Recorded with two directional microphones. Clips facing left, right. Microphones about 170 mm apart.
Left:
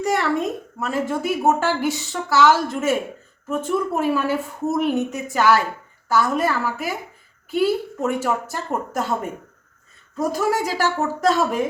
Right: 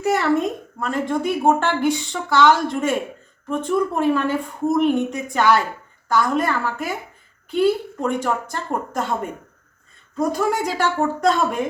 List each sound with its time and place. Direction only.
0.0 s a woman's voice: centre (ahead or behind)
10.2 s a woman's voice: 5° left (ahead or behind)